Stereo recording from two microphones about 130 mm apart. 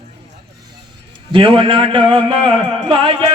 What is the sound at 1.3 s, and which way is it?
Music, 40° right (ahead or behind).